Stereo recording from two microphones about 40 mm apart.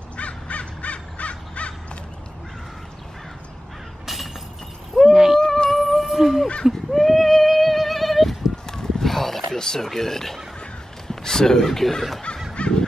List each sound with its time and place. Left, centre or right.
0.2 s crow: left
4.0 s breaking: centre
5.1 s a sound: centre
5.4 s music: centre
6.1 s a sound: centre
6.6 s horse: centre
8.6 s a sound: centre
11.1 s speech: centre
12.6 s fowl: left